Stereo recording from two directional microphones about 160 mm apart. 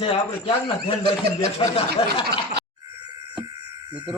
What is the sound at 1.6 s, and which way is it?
Speech, 30° left (ahead or behind).